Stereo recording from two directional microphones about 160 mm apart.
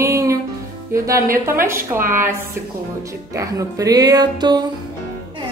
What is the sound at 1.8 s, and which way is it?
Speech, 60° right (ahead or behind).